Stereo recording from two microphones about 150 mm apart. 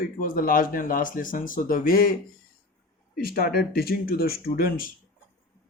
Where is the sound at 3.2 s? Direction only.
90° left.